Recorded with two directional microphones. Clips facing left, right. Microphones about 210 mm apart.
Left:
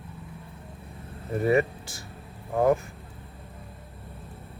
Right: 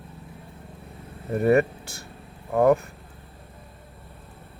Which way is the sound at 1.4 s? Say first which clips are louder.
Right 3 dB; 60° right (ahead or behind).